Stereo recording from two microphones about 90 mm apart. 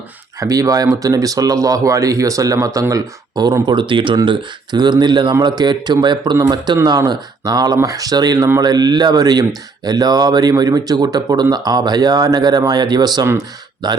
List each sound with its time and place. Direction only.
0.3 s speech: 40° right (ahead or behind)
2.9 s speech: 50° right (ahead or behind)
3.7 s speech: 65° right (ahead or behind)
4.3 s speech: 55° right (ahead or behind)